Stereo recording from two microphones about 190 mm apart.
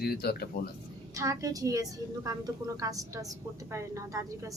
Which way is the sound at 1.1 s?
15° right (ahead or behind).